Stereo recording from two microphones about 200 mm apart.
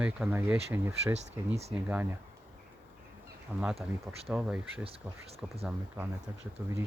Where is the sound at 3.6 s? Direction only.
5° right (ahead or behind).